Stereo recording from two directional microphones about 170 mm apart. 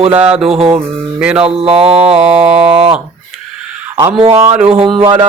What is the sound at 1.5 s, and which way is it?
Mantra, 35° right (ahead or behind).